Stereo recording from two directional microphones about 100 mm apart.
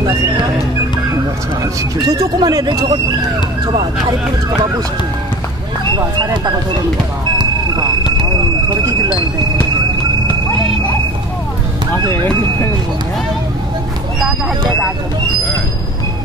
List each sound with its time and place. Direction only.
1.6 s speech: 40° right (ahead or behind)
7.3 s a sound: 45° right (ahead or behind)
12.1 s speech: 25° left (ahead or behind)